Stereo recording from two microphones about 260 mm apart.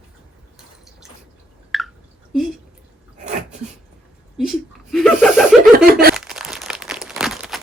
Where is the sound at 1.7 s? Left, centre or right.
Centre.